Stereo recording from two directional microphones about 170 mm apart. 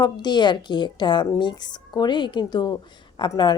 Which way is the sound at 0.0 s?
25° left (ahead or behind).